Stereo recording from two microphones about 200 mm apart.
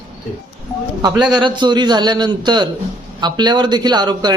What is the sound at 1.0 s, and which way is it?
A man's voice, 20° right (ahead or behind).